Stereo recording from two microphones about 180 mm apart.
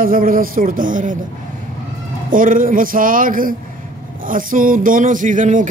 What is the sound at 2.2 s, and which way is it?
Speech, 50° right (ahead or behind).